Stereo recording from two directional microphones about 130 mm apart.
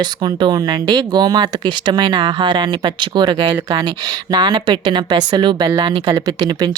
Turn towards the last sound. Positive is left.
turn(degrees=-35)  # may be behind; listen again after turning